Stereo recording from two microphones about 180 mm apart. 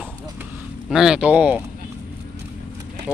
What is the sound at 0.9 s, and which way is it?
Speech, centre (ahead or behind).